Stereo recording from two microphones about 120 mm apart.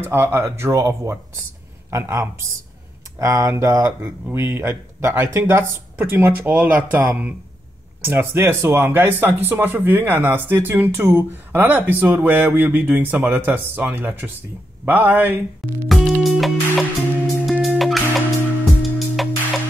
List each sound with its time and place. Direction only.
0.0 s speech: 20° right (ahead or behind)
15.9 s music: centre (ahead or behind)